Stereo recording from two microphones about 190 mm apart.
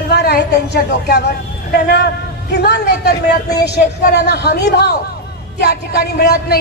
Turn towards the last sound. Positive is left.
turn(degrees=60)  # may be behind; listen again after turning